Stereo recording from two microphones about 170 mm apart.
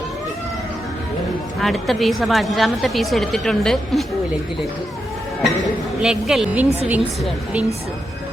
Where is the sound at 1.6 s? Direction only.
Centre (ahead or behind).